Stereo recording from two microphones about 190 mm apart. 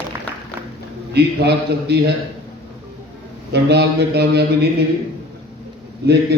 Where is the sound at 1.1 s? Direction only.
60° right (ahead or behind).